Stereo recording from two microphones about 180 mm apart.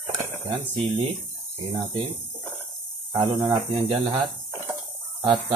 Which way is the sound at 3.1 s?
25° right (ahead or behind).